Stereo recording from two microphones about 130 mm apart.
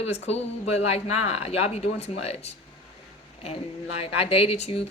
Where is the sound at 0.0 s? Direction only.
55° left (ahead or behind).